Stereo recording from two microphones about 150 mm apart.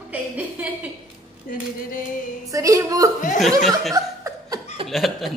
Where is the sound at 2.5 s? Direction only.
20° right (ahead or behind).